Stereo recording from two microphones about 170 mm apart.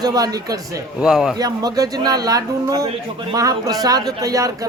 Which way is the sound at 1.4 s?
20° right (ahead or behind).